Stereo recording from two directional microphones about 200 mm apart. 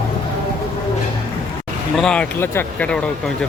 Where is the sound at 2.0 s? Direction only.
5° left (ahead or behind).